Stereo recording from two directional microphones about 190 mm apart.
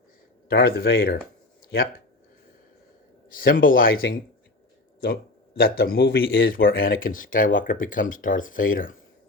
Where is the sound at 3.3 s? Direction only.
45° left (ahead or behind).